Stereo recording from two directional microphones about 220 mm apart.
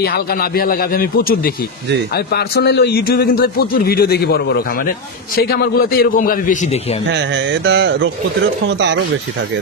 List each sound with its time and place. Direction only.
0.0 s a man's voice: 45° left (ahead or behind)
7.1 s a sound: 55° right (ahead or behind)
8.6 s speech: 55° right (ahead or behind)